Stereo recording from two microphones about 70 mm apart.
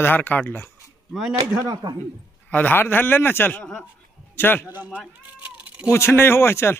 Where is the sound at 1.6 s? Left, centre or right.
Right.